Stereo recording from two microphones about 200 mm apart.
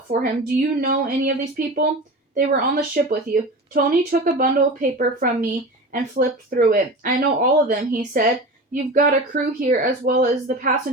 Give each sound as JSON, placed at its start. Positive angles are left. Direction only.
{"t": 0.1, "sound": "a woman's voice", "side_deg": -45}